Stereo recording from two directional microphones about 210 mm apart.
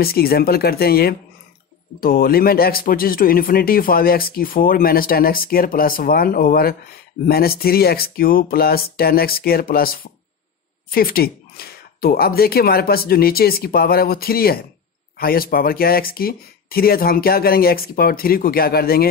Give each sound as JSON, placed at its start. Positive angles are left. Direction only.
{"t": 0.0, "sound": "a man's voice", "side_deg": 45}